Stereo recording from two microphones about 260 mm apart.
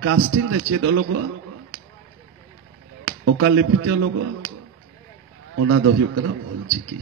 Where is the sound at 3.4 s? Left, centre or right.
Right.